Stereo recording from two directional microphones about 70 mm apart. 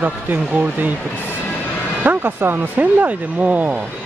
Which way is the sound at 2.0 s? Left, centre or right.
Right.